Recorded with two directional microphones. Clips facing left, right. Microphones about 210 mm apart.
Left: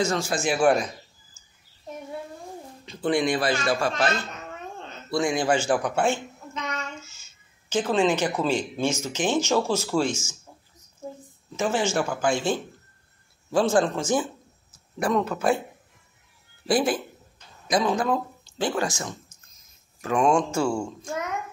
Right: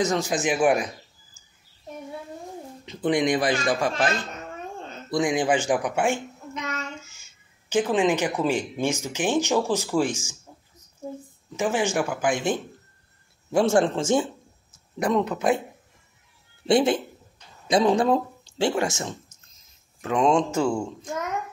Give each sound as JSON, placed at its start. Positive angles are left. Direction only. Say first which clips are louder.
{"t": 0.0, "sound": "a man's voice", "louder": "right 1 dB", "side_deg": -20}
{"t": 1.4, "sound": "a sound", "louder": "right 1 dB", "side_deg": -15}
{"t": 2.8, "sound": "a man's voice", "louder": "right 1 dB", "side_deg": -20}
{"t": 11.5, "sound": "a man's voice", "louder": "right 1 dB", "side_deg": -15}
{"t": 16.6, "sound": "speech", "louder": "right 3 dB", "side_deg": -25}